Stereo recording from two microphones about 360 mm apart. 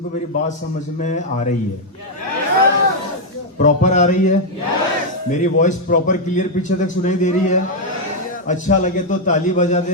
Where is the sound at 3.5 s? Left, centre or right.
Left.